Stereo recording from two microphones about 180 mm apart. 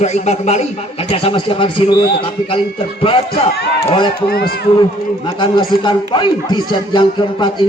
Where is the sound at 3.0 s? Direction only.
30° left (ahead or behind).